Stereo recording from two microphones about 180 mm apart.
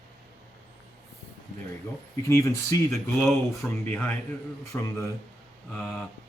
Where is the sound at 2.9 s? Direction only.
Centre (ahead or behind).